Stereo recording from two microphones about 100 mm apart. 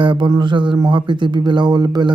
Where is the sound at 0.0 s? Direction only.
55° right (ahead or behind).